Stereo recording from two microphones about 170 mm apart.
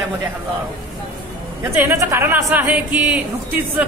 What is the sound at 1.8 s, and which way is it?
A man's voice, 15° right (ahead or behind).